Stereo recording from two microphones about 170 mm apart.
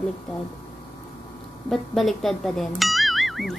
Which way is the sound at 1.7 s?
Centre (ahead or behind).